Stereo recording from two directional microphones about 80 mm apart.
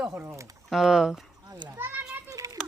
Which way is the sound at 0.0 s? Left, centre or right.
Right.